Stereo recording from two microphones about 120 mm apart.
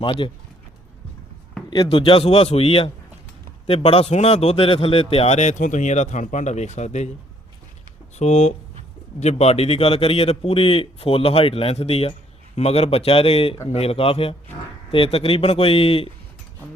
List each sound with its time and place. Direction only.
0.0 s speech: 45° left (ahead or behind)
1.7 s a man's voice: 45° left (ahead or behind); by 7.1 s 70° left (ahead or behind)
8.1 s a man's voice: 70° left (ahead or behind); by 16.0 s 50° left (ahead or behind)